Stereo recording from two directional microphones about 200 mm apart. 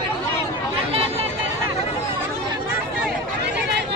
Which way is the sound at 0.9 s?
30° right (ahead or behind).